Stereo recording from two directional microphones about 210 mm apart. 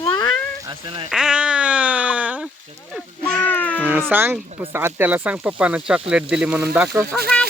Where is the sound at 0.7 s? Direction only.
25° right (ahead or behind).